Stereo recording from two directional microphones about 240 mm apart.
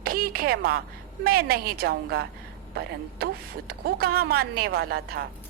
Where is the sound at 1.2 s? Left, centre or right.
Right.